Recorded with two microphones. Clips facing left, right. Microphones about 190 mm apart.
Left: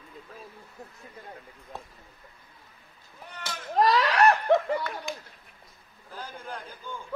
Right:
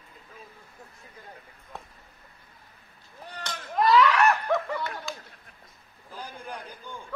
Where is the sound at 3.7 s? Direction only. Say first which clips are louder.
Right 2 dB; 35° left (ahead or behind).